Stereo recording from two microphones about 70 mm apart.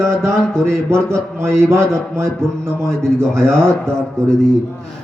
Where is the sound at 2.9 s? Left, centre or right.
Centre.